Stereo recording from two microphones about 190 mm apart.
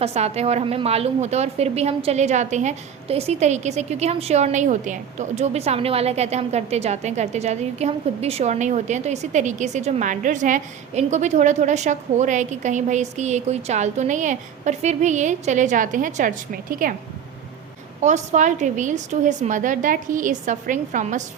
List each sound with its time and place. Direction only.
0.0 s a woman's voice: 35° right (ahead or behind)
18.0 s a woman's voice: 40° right (ahead or behind)